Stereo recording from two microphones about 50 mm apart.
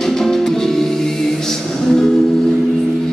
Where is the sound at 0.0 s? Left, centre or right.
Centre.